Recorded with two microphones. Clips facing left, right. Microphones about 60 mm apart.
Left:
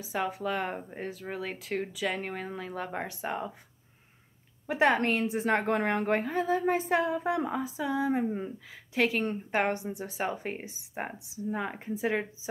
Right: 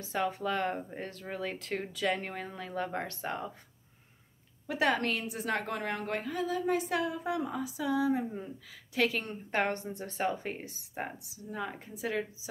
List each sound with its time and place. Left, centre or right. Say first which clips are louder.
0.0 s speech: left 1 dB; centre
4.6 s a woman's voice: left 4 dB; left
8.9 s speech: left 3 dB; left